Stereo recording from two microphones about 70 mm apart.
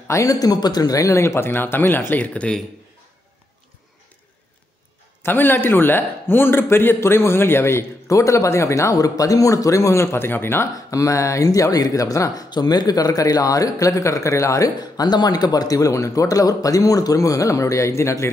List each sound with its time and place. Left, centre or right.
0.1 s speech: left
2.1 s a man's voice: centre
5.2 s a man's voice: left
10.9 s speech: left
12.4 s speech: left
14.8 s speech: left